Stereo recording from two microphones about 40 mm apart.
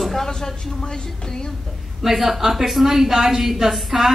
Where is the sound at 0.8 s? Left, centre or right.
Centre.